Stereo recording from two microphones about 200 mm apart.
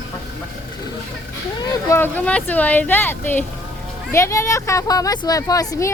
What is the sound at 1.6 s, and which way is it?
Speech, 15° left (ahead or behind).